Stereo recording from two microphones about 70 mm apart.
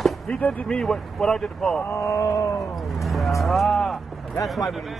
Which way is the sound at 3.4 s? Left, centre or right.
Centre.